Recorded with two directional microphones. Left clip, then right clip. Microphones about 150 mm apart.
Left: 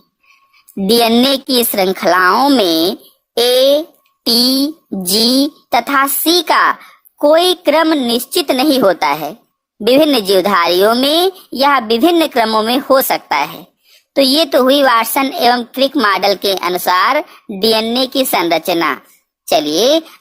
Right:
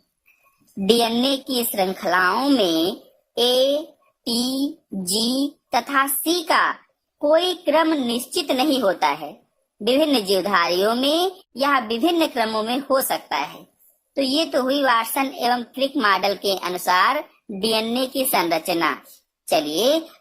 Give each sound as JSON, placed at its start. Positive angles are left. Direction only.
{"t": 0.9, "sound": "a woman's voice", "side_deg": 35}